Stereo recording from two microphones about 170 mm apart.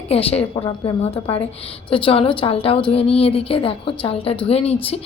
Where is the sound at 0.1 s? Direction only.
35° left (ahead or behind).